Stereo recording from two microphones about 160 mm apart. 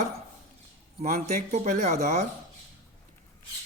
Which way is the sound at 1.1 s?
50° right (ahead or behind).